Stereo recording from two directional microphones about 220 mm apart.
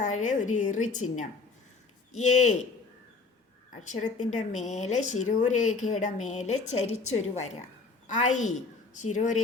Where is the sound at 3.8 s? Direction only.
35° left (ahead or behind).